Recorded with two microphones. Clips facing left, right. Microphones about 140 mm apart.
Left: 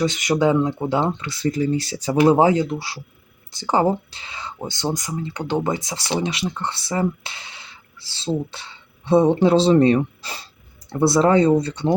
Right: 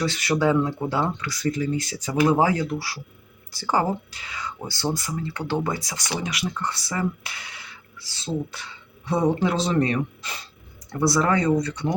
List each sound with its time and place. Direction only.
0.0 s speech: 20° left (ahead or behind)